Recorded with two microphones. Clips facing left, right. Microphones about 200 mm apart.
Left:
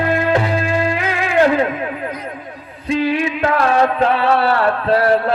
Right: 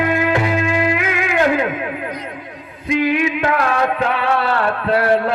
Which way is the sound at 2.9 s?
30° left (ahead or behind).